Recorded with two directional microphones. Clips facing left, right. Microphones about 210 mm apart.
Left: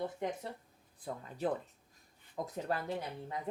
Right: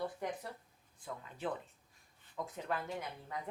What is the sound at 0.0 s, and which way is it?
Speech, 25° left (ahead or behind).